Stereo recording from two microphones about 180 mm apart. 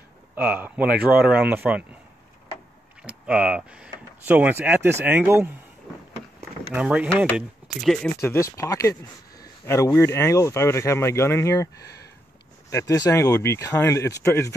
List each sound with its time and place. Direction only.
0.4 s speech: 10° right (ahead or behind)
3.0 s speech: 5° right (ahead or behind)
6.7 s speech: 5° right (ahead or behind)
8.2 s speech: 15° left (ahead or behind)